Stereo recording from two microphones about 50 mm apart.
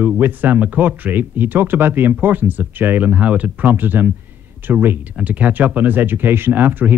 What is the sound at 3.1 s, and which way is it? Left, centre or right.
Speech, right.